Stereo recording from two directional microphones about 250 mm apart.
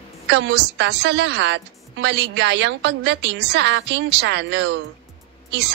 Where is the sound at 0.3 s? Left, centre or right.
Right.